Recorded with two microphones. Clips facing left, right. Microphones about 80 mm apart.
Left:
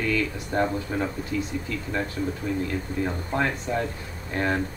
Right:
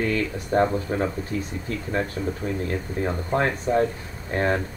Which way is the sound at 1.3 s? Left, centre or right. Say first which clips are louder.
Even; right.